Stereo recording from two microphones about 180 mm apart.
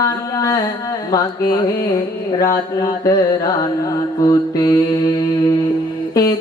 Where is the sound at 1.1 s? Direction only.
20° left (ahead or behind).